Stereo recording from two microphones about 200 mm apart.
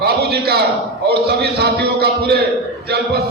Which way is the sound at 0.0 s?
50° right (ahead or behind).